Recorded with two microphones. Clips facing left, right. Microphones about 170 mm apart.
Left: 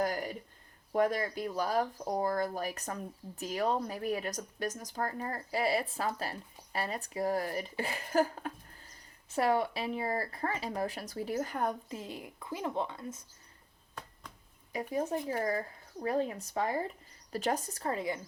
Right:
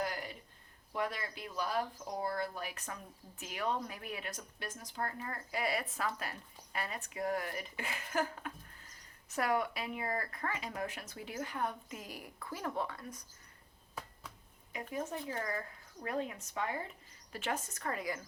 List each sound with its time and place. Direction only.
0.0 s a sound: 45° left (ahead or behind)
0.9 s speech: 45° left (ahead or behind)
11.9 s a woman's voice: 25° left (ahead or behind)
14.7 s speech: 35° left (ahead or behind)